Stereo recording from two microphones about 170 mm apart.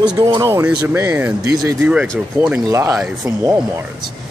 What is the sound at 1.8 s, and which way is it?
Speech, 10° right (ahead or behind).